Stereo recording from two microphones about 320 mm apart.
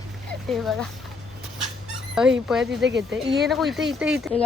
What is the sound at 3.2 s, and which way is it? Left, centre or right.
Speech, centre.